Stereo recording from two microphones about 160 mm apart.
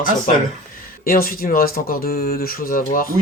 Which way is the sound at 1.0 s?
65° left (ahead or behind).